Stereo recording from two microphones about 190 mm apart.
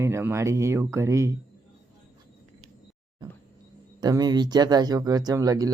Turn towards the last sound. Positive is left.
turn(degrees=-20)  # may be behind; listen again after turning